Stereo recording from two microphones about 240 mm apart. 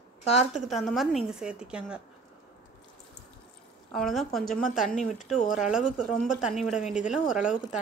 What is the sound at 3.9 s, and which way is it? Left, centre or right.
A woman's voice, centre.